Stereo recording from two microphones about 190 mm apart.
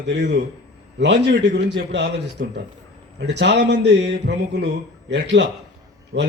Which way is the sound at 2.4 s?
85° right.